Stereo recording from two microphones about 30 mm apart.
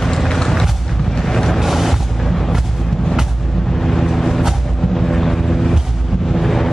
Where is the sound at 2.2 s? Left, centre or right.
Centre.